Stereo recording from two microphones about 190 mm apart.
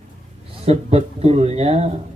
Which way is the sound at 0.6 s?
35° right (ahead or behind).